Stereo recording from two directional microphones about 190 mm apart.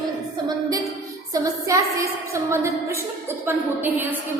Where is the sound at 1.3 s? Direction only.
15° right (ahead or behind).